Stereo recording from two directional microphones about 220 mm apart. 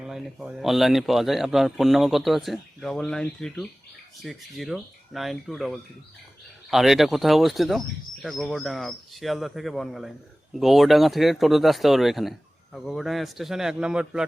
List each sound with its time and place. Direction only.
0.0 s a man's voice: centre (ahead or behind)